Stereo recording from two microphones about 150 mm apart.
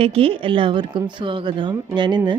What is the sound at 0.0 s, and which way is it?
Speech, 40° right (ahead or behind).